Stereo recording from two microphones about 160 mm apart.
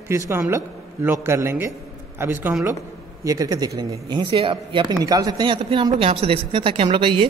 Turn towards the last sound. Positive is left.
turn(degrees=-30)  # may be behind; listen again after turning